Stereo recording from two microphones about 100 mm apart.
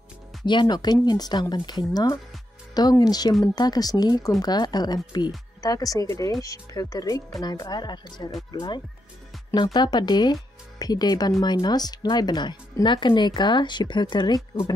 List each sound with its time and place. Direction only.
0.5 s speech: 50° left (ahead or behind)